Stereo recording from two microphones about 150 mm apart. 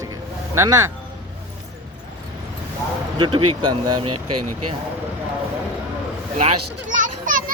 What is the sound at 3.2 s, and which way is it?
Speech, 35° right (ahead or behind).